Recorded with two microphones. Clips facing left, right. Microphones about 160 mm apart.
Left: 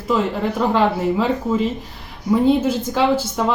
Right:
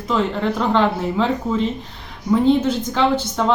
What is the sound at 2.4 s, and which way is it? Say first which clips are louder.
Speech: even; 10° left (ahead or behind).